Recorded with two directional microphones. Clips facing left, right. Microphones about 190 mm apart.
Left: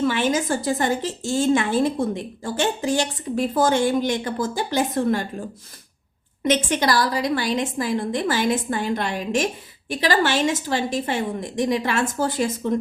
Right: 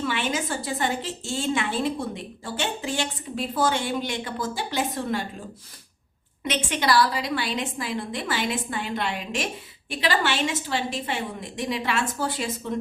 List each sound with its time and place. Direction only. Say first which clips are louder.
0.1 s a woman's voice: left 6 dB; 45° left (ahead or behind)
6.4 s a woman's voice: left 6 dB; 45° left (ahead or behind)